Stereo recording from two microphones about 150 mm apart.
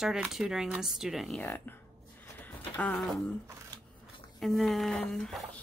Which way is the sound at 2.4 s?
10° left (ahead or behind).